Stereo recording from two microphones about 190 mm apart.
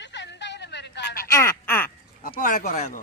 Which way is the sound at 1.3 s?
15° left (ahead or behind).